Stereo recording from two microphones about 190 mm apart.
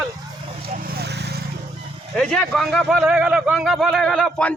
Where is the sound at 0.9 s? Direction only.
60° right (ahead or behind).